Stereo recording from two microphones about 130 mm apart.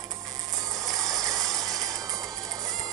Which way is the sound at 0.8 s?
25° right (ahead or behind).